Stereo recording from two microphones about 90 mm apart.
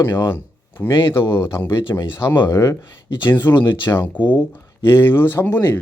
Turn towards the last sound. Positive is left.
turn(degrees=20)  # may be behind; listen again after turning